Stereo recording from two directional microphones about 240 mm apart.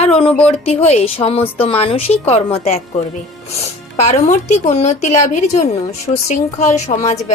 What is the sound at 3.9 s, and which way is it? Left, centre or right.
Speech, left.